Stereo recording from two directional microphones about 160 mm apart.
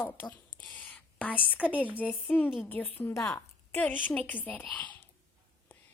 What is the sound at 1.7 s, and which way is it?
Speech, 10° right (ahead or behind).